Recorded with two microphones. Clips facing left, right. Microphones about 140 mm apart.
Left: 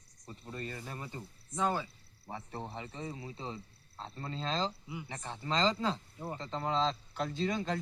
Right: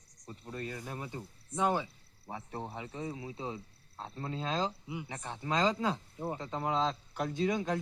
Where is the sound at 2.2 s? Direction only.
5° right (ahead or behind).